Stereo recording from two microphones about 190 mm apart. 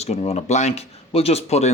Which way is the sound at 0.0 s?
35° left (ahead or behind).